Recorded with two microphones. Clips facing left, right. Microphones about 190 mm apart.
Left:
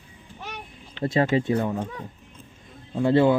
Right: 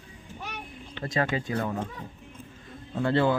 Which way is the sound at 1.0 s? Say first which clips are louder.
Left 7 dB; 25° left (ahead or behind).